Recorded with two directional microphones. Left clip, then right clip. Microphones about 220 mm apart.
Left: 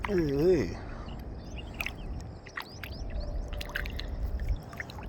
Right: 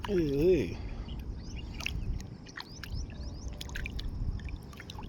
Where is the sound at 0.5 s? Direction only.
30° left (ahead or behind).